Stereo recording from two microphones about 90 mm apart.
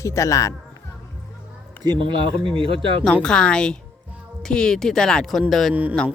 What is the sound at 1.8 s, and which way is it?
Speech, 60° right (ahead or behind).